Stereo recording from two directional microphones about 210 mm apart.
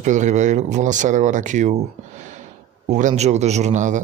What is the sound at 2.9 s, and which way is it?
Speech, 35° right (ahead or behind).